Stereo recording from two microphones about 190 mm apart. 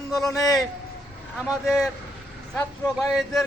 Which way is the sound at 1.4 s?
Centre (ahead or behind).